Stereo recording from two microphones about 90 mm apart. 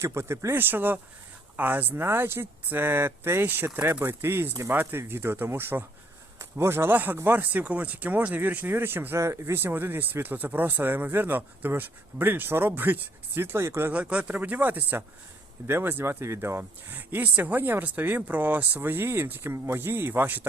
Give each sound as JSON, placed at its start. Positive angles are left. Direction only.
{"t": 0.0, "sound": "speech", "side_deg": -30}
{"t": 13.9, "sound": "speech", "side_deg": -15}